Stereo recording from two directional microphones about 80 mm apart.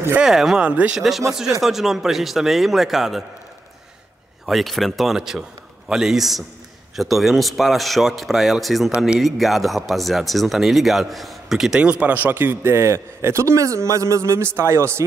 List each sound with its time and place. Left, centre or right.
0.2 s speech: centre
0.7 s speech: centre
0.9 s a man's voice: centre
4.5 s a man's voice: centre
8.9 s speech: centre
9.2 s speech: centre; by 15.0 s right